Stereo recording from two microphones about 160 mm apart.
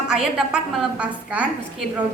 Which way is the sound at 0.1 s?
5° right (ahead or behind).